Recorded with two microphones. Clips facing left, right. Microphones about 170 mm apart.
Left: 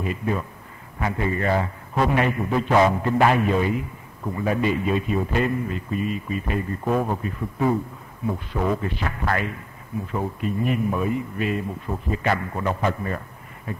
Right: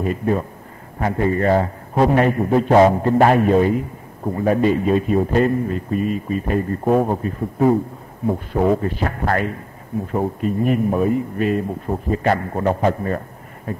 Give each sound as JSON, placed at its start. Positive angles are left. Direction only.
{"t": 0.0, "sound": "a man's voice", "side_deg": -45}